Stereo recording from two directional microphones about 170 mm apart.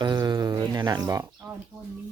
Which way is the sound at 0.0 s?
25° right (ahead or behind).